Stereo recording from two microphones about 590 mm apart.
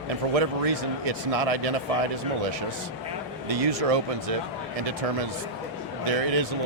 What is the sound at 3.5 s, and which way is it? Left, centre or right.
Speech, right.